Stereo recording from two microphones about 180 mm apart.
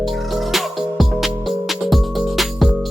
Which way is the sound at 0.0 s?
Centre (ahead or behind).